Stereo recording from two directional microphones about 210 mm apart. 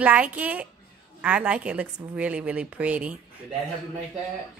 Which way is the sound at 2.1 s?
5° right (ahead or behind).